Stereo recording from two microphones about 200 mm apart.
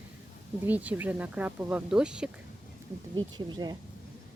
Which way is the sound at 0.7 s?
10° right (ahead or behind).